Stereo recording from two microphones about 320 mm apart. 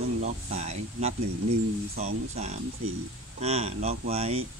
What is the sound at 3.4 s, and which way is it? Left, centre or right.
Speech, centre.